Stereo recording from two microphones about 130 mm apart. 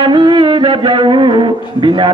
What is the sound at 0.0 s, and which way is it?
Music, 35° right (ahead or behind).